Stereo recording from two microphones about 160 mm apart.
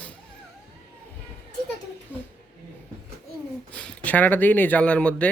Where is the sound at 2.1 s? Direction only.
10° left (ahead or behind).